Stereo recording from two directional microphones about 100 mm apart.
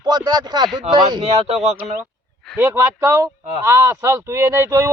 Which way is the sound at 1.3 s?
90° right.